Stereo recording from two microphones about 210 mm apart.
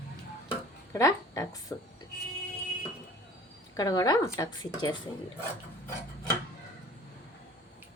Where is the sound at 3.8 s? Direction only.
15° left (ahead or behind).